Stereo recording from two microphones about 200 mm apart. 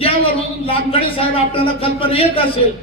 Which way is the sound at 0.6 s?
25° left (ahead or behind).